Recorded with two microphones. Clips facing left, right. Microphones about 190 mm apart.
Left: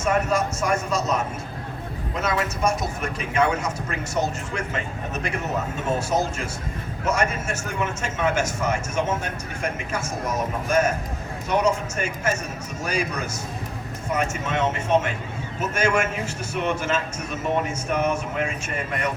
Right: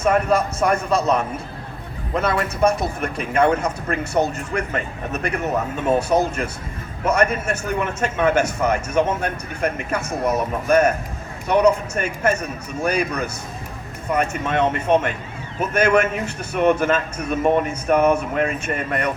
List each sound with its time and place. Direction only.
0.0 s a man's voice: 60° right (ahead or behind)